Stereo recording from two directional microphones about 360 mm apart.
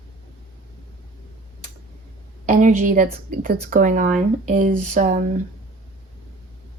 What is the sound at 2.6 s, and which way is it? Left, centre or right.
A woman's voice, right.